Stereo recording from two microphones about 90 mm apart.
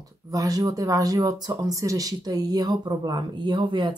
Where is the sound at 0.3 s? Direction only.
45° right (ahead or behind).